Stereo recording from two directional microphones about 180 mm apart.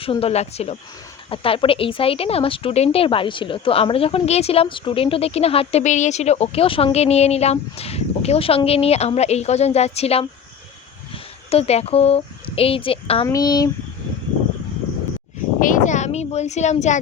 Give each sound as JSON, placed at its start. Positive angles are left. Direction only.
{"t": 0.0, "sound": "speech", "side_deg": 30}
{"t": 15.6, "sound": "speech", "side_deg": 45}